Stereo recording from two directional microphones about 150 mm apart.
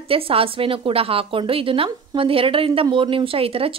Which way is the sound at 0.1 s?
40° right (ahead or behind).